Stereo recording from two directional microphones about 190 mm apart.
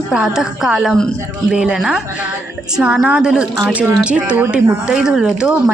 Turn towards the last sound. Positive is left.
turn(degrees=-5)  # may be behind; listen again after turning